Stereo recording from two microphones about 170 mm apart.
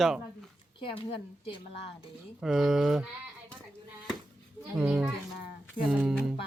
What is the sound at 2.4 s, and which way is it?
Speech, centre (ahead or behind).